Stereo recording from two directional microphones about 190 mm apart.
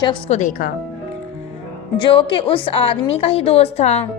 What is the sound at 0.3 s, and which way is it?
Speech, 40° left (ahead or behind).